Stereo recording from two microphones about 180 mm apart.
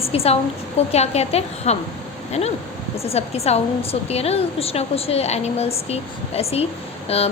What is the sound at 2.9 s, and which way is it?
A woman's voice, 35° left (ahead or behind).